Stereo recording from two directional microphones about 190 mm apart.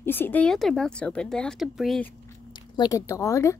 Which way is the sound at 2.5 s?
25° left (ahead or behind).